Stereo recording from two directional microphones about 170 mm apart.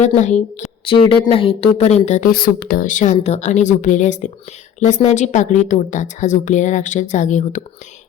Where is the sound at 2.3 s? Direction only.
60° left (ahead or behind).